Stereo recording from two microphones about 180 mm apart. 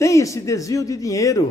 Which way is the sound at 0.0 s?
15° left (ahead or behind).